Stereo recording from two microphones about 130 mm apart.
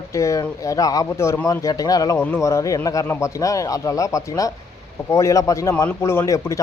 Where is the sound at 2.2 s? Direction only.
20° left (ahead or behind).